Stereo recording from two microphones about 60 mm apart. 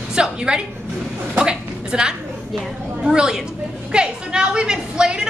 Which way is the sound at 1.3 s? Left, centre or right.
Centre.